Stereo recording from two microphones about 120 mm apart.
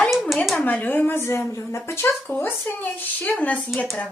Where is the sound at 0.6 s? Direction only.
15° left (ahead or behind).